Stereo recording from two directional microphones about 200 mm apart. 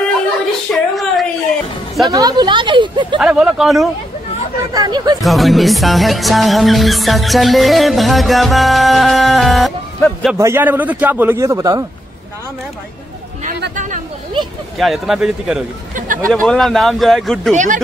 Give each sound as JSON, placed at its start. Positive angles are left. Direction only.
{"t": 0.7, "sound": "a sound", "side_deg": 0}
{"t": 2.0, "sound": "speech", "side_deg": -20}
{"t": 3.2, "sound": "music", "side_deg": -5}
{"t": 4.7, "sound": "speech", "side_deg": -20}
{"t": 5.2, "sound": "music", "side_deg": 0}
{"t": 10.3, "sound": "a man's voice", "side_deg": -15}
{"t": 13.7, "sound": "chatter", "side_deg": -40}
{"t": 14.8, "sound": "music", "side_deg": 0}
{"t": 15.9, "sound": "a sound", "side_deg": -40}
{"t": 16.3, "sound": "music", "side_deg": 5}